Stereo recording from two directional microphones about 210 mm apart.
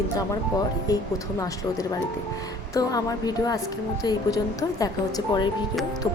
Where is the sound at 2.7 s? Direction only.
15° left (ahead or behind).